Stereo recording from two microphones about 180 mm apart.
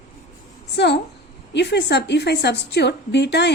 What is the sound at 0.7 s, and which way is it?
A woman's voice, 70° left (ahead or behind).